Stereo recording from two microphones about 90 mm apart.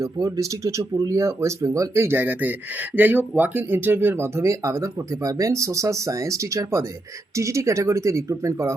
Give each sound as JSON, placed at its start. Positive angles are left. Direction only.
{"t": 0.0, "sound": "speech", "side_deg": -40}